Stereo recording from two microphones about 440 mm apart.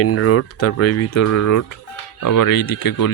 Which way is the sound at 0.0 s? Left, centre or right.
Left.